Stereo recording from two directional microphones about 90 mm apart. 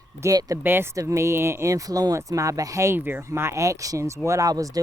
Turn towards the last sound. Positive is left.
turn(degrees=-40)  # may be behind; listen again after turning